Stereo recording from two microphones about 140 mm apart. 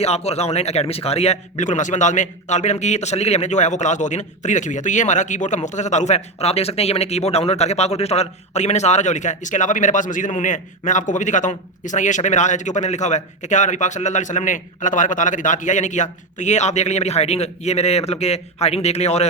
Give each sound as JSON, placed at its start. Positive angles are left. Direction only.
{"t": 0.0, "sound": "speech", "side_deg": 50}